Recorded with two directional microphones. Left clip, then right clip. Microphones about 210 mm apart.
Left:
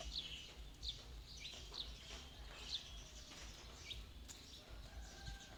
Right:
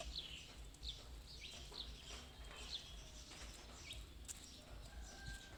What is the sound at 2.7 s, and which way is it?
Bird, 40° left (ahead or behind).